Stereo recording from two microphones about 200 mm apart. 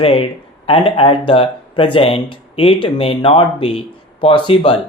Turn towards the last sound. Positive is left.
turn(degrees=25)  # may be behind; listen again after turning